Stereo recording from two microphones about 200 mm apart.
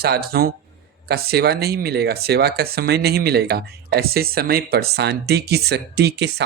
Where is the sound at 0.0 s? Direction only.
50° right (ahead or behind).